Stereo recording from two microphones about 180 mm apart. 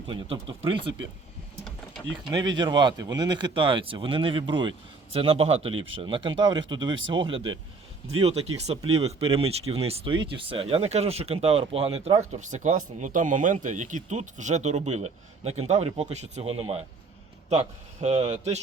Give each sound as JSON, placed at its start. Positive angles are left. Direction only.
{"t": 0.1, "sound": "speech", "side_deg": -30}
{"t": 2.6, "sound": "speech", "side_deg": -25}